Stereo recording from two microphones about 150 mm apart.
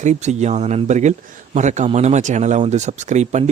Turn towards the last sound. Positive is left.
turn(degrees=-50)  # may be behind; listen again after turning